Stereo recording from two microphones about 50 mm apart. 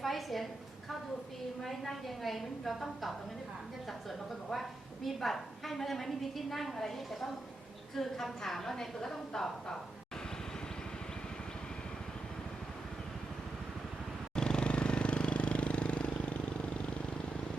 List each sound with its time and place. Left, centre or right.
0.0 s a sound: centre
1.6 s a woman's voice: centre
5.0 s a woman's voice: centre
14.3 s vehicle: centre